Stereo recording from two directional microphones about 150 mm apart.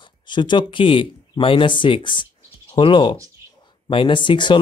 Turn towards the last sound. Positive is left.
turn(degrees=30)  # may be behind; listen again after turning